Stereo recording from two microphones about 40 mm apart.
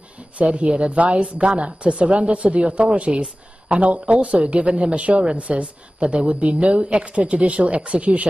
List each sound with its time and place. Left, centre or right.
0.4 s a woman's voice: right